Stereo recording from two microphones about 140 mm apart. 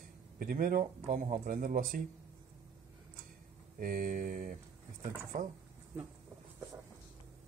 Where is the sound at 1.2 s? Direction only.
55° right (ahead or behind).